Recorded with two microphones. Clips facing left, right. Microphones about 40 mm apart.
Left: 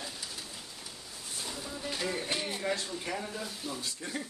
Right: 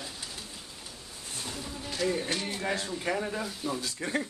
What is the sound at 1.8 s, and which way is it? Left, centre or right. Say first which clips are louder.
Music: right 5 dB; centre.